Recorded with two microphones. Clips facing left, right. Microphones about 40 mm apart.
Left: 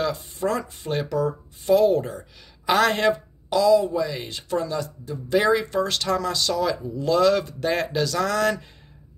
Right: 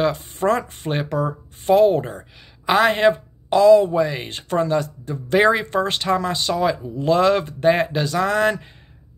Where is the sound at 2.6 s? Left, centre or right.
Right.